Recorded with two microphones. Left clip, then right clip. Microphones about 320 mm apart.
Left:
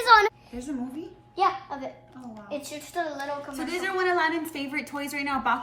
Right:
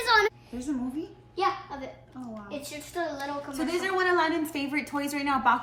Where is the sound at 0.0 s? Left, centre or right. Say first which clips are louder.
Left 5 dB; centre.